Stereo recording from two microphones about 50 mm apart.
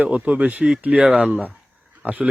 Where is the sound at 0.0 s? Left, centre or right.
Right.